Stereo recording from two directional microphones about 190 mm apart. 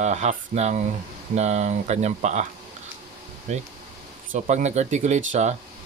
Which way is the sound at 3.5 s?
40° right (ahead or behind).